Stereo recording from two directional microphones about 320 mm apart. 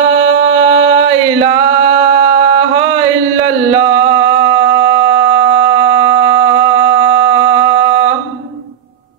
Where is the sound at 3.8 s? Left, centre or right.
Centre.